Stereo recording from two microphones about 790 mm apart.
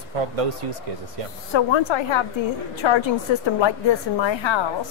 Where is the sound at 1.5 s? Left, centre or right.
Left.